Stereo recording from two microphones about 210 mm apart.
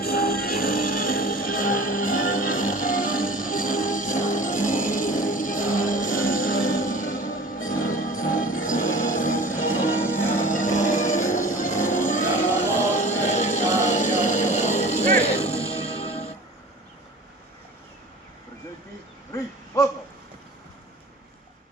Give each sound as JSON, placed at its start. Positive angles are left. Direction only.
{"t": 0.0, "sound": "music", "side_deg": 45}
{"t": 19.3, "sound": "owl", "side_deg": 15}